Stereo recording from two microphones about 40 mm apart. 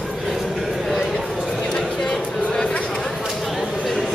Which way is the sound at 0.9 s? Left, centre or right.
Centre.